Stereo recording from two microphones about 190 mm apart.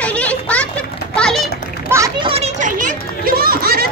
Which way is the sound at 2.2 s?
35° right (ahead or behind).